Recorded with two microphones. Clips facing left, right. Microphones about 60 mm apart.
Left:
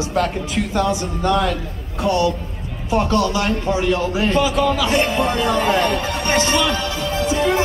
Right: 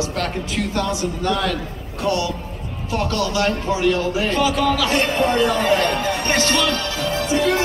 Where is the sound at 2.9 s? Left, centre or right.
Left.